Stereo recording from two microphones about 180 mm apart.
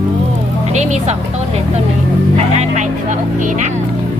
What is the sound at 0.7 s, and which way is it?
Speech, 40° right (ahead or behind).